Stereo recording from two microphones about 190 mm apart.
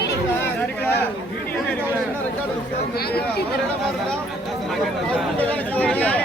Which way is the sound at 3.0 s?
55° left (ahead or behind).